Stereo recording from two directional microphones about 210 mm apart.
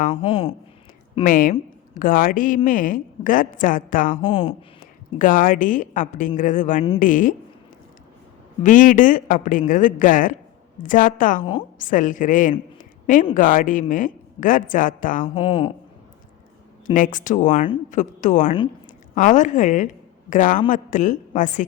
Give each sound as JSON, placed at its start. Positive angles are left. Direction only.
{"t": 0.1, "sound": "speech", "side_deg": 25}
{"t": 1.2, "sound": "speech", "side_deg": 40}
{"t": 4.2, "sound": "speech", "side_deg": 25}
{"t": 5.1, "sound": "speech", "side_deg": 40}
{"t": 8.6, "sound": "speech", "side_deg": 40}
{"t": 15.4, "sound": "speech", "side_deg": 25}
{"t": 16.8, "sound": "speech", "side_deg": 40}